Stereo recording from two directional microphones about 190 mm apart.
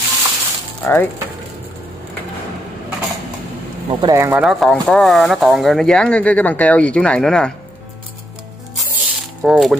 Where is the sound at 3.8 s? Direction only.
15° right (ahead or behind).